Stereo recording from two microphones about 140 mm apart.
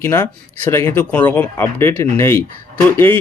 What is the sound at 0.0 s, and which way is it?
Speech, 15° left (ahead or behind).